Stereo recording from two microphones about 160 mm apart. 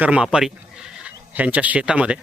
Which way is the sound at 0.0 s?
5° right (ahead or behind).